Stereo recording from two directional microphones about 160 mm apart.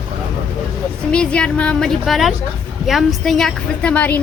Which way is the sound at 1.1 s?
5° left (ahead or behind).